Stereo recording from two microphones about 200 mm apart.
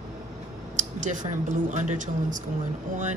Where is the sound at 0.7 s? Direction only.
40° right (ahead or behind).